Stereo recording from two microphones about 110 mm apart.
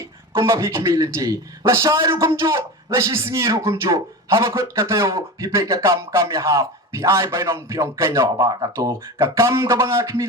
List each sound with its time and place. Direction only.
0.3 s speech: 25° right (ahead or behind)